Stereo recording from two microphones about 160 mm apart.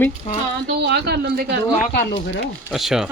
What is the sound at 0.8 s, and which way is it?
Speech, 90° right.